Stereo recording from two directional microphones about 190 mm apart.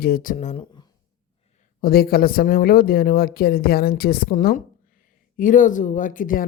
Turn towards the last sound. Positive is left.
turn(degrees=45)  # may be behind; listen again after turning